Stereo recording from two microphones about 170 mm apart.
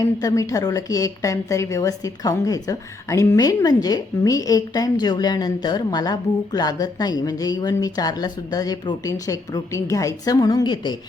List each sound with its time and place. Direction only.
0.0 s a woman's voice: 20° left (ahead or behind)